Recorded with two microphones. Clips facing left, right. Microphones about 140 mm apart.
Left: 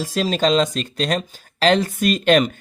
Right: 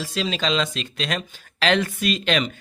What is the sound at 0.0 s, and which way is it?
Speech, 45° left (ahead or behind).